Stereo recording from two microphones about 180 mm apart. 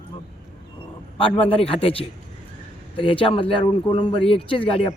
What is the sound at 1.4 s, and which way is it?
Speech, 30° left (ahead or behind).